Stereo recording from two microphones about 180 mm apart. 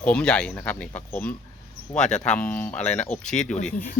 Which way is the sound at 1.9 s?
40° left (ahead or behind).